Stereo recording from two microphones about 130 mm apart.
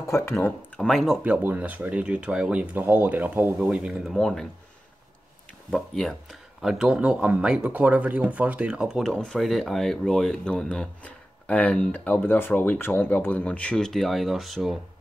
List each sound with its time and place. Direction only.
0.0 s speech: 20° left (ahead or behind)
0.7 s speech: 5° left (ahead or behind)
5.7 s speech: 5° left (ahead or behind)